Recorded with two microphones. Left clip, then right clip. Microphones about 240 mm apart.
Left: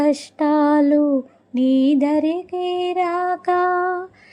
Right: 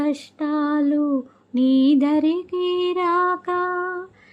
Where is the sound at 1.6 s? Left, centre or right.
Centre.